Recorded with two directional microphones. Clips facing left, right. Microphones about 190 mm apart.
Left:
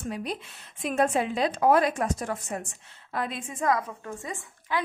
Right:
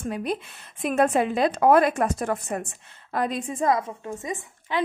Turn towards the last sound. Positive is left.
turn(degrees=-20)  # may be behind; listen again after turning